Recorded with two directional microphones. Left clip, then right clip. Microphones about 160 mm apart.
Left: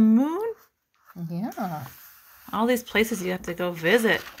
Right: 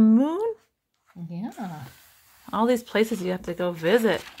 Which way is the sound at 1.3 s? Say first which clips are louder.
Left 5 dB; 50° left (ahead or behind).